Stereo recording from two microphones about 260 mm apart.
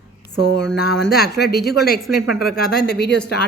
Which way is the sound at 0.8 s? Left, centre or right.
Left.